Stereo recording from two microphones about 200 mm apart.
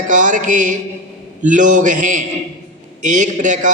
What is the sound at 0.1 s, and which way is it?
A man's voice, 40° right (ahead or behind).